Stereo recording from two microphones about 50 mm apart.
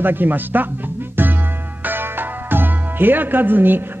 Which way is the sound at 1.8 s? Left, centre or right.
Right.